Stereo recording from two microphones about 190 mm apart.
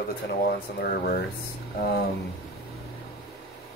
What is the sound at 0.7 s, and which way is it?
Speech, 50° left (ahead or behind).